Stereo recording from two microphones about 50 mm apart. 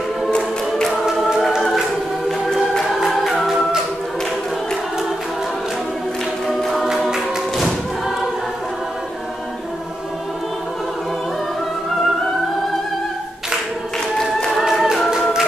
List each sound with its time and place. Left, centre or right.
2.2 s choir: centre
3.0 s music: centre
6.4 s choir: centre
14.6 s music: centre